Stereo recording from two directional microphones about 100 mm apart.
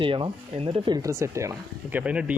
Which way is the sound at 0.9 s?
40° right (ahead or behind).